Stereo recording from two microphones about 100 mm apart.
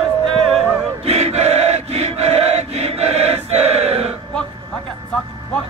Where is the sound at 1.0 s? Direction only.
90° right.